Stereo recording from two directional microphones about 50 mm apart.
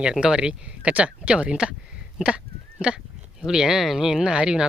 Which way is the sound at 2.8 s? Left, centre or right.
Centre.